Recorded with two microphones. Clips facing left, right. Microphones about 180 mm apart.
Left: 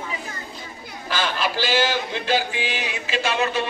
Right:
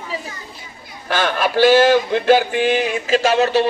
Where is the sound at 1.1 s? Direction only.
55° right (ahead or behind).